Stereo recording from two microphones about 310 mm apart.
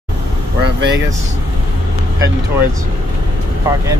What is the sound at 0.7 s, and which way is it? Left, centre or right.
Speech, right.